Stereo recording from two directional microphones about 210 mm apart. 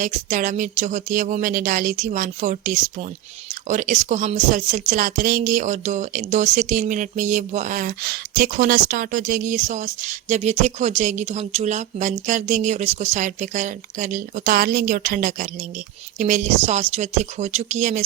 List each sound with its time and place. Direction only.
0.0 s a woman's voice: 40° right (ahead or behind)